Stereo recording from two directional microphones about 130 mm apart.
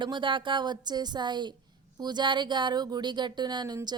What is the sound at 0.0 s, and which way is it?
Speech, 35° right (ahead or behind).